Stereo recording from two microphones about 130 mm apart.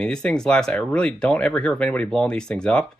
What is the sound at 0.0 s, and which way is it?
Speech, 5° left (ahead or behind).